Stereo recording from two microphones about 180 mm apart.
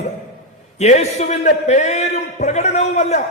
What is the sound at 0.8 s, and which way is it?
A man's voice, 40° left (ahead or behind).